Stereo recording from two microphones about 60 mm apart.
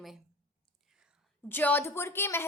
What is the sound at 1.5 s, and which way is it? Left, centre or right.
Speech, left.